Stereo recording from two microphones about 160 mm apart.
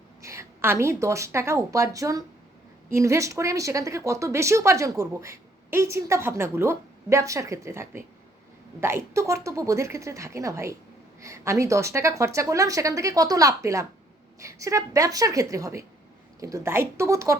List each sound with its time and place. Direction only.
0.2 s speech: 15° right (ahead or behind)